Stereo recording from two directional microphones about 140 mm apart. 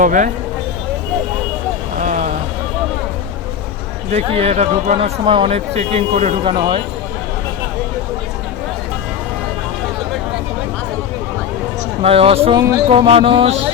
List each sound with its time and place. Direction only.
0.0 s speech: 70° right (ahead or behind)
2.0 s vehicle: 65° right (ahead or behind)
4.1 s speech: 45° right (ahead or behind)
6.4 s speech: 40° right (ahead or behind)
12.0 s speech: 45° right (ahead or behind)